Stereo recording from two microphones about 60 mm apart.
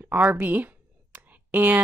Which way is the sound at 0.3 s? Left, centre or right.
Right.